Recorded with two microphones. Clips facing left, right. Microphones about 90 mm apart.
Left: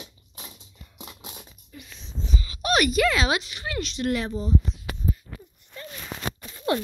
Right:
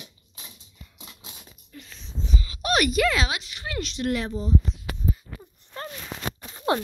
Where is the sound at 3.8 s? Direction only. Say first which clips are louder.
Even; 25° left (ahead or behind).